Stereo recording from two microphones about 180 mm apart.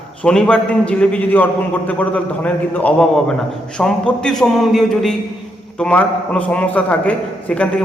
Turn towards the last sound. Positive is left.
turn(degrees=10)  # may be behind; listen again after turning